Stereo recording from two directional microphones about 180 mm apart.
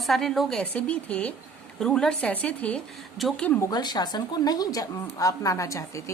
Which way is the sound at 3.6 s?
20° left (ahead or behind).